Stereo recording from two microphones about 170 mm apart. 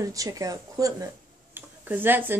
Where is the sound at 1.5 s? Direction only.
10° right (ahead or behind).